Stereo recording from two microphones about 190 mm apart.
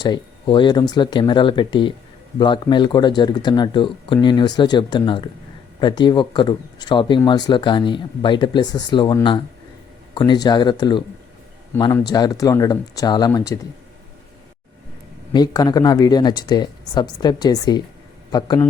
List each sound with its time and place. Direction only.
0.0 s speech: 25° left (ahead or behind)
15.3 s a man's voice: 20° left (ahead or behind)